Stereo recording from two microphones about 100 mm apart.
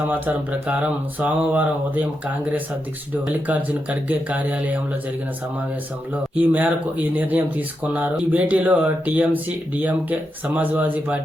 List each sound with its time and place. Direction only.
0.7 s speech: 15° right (ahead or behind)
6.3 s speech: 15° right (ahead or behind)